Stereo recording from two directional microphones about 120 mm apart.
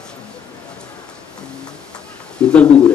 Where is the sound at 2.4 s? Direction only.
10° left (ahead or behind).